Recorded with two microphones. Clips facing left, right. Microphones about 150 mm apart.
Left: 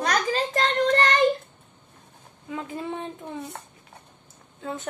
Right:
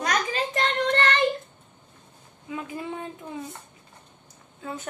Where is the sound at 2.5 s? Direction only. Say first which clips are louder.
Left 1 dB; 25° left (ahead or behind).